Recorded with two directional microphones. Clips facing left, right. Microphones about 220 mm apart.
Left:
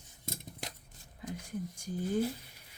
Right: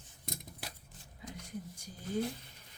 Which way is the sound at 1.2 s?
50° left (ahead or behind).